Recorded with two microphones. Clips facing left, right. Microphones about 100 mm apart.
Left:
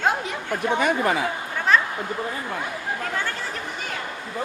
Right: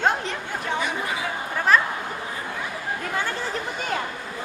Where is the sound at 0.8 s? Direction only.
55° left (ahead or behind).